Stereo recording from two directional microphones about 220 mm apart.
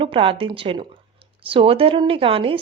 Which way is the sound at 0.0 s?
25° right (ahead or behind).